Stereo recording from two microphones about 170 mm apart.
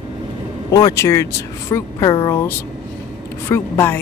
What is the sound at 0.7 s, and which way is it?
Speech, 20° left (ahead or behind).